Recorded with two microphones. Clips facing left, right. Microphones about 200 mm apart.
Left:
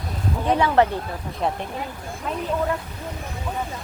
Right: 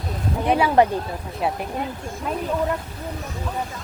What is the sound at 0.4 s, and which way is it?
Speech, 15° right (ahead or behind).